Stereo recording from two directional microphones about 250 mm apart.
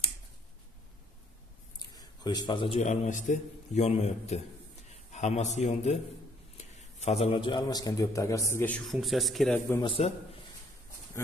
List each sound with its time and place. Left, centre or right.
2.0 s a man's voice: centre
9.7 s a man's voice: centre